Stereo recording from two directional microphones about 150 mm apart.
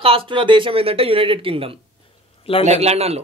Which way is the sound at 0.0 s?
35° right (ahead or behind).